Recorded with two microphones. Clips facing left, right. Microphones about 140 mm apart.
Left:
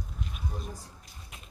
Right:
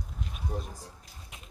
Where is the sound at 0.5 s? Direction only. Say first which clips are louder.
Right 8 dB; 65° right (ahead or behind).